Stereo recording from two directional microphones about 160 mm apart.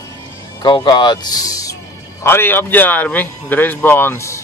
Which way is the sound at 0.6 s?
30° left (ahead or behind).